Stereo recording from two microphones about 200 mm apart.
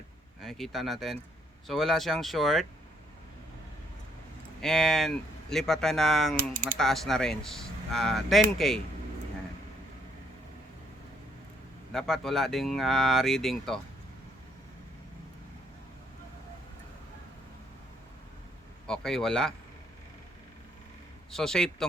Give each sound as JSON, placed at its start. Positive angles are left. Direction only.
{"t": 0.3, "sound": "speech", "side_deg": 0}
{"t": 4.6, "sound": "speech", "side_deg": 0}
{"t": 11.9, "sound": "speech", "side_deg": 0}
{"t": 18.9, "sound": "speech", "side_deg": 0}
{"t": 21.2, "sound": "a man's voice", "side_deg": 5}